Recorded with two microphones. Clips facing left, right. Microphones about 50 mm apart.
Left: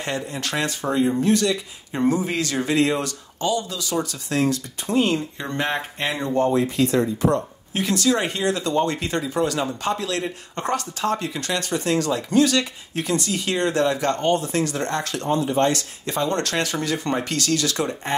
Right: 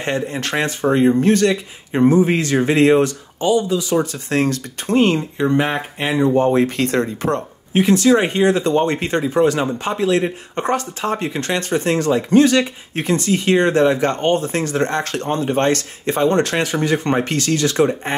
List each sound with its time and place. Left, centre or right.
0.0 s speech: right
1.9 s speech: right
3.3 s speech: right
4.3 s speech: right
5.6 s speech: centre
6.5 s speech: right
7.7 s speech: right
15.0 s speech: right